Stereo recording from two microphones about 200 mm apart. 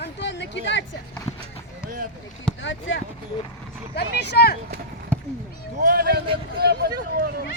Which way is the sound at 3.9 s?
50° left (ahead or behind).